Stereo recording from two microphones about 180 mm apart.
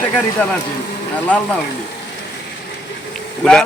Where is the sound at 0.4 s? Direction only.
10° left (ahead or behind).